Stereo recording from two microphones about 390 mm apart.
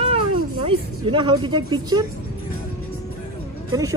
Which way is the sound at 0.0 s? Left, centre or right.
Centre.